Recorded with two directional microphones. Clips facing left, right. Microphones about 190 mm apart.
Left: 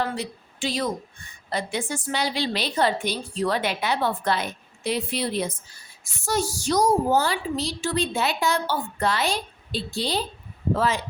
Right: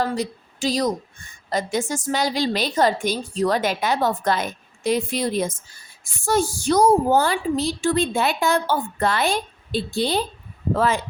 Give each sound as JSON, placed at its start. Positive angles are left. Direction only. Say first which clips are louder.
{"t": 0.0, "sound": "a woman's voice", "louder": "right 4 dB", "side_deg": -40}